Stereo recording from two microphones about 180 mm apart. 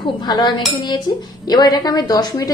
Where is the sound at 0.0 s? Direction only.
25° left (ahead or behind).